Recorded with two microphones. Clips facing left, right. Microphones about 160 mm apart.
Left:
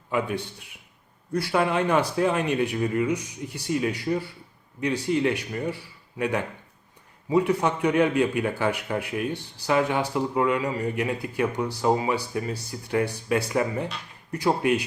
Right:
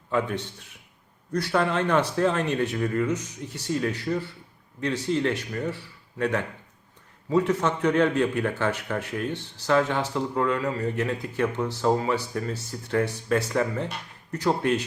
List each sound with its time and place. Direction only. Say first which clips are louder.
0.1 s a man's voice: even; 10° left (ahead or behind)